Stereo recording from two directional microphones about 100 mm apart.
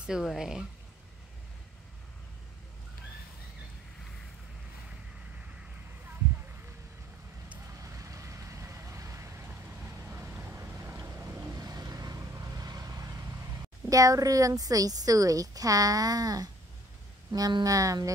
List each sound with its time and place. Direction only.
0.0 s speech: 5° right (ahead or behind)
7.8 s vehicle: 30° right (ahead or behind)
10.0 s boat: 20° right (ahead or behind); by 13.1 s 35° right (ahead or behind)
13.8 s a woman's voice: 35° right (ahead or behind)